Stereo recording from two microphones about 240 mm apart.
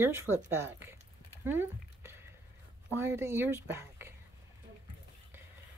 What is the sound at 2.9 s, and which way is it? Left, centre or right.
Speech, centre.